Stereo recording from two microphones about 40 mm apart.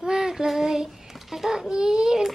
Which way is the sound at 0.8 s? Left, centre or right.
Centre.